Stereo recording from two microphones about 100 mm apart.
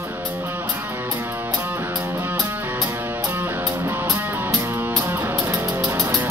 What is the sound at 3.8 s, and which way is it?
Music, 35° right (ahead or behind).